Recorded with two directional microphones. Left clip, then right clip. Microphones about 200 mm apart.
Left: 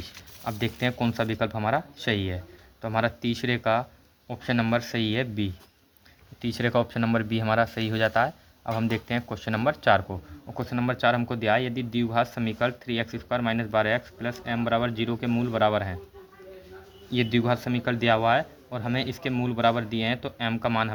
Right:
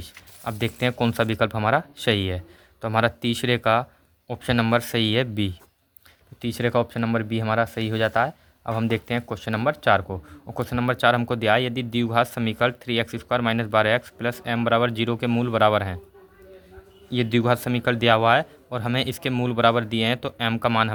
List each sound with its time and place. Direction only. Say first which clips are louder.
0.4 s a man's voice: right 3 dB; 30° right (ahead or behind)
6.4 s a man's voice: right 2 dB; 25° right (ahead or behind)
17.1 s a man's voice: right 3 dB; 30° right (ahead or behind)